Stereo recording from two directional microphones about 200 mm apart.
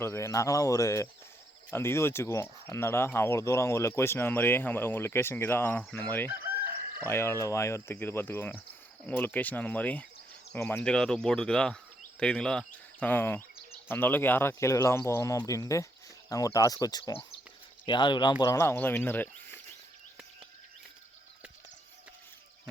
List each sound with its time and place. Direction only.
0.0 s speech: 15° left (ahead or behind)